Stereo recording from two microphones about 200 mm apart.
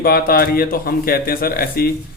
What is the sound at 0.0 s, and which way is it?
A man's voice, 50° left (ahead or behind).